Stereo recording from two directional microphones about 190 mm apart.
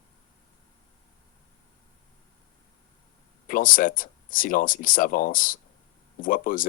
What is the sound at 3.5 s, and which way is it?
Speech, 45° left (ahead or behind).